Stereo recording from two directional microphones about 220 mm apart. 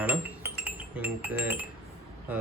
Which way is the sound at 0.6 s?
5° right (ahead or behind).